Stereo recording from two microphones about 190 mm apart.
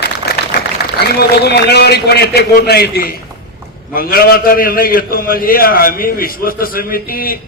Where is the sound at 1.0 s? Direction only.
60° left (ahead or behind).